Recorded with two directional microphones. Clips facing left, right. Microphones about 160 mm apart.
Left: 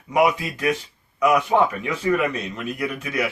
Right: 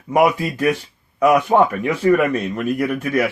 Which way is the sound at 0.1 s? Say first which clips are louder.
Right 3 dB; 45° right (ahead or behind).